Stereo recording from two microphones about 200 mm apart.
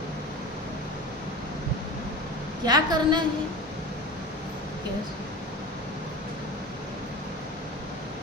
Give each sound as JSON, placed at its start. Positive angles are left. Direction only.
{"t": 2.6, "sound": "a woman's voice", "side_deg": -20}